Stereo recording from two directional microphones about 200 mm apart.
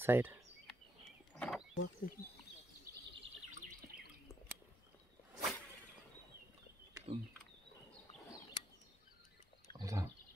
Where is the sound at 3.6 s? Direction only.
50° right (ahead or behind).